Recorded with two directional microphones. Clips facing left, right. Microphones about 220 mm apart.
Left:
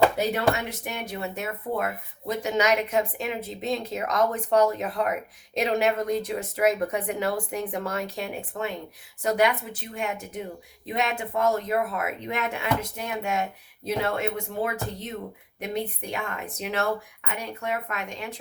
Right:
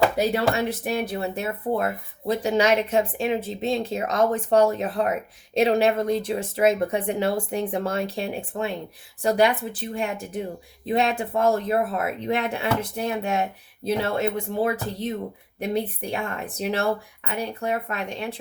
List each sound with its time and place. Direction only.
0.5 s speech: 30° right (ahead or behind)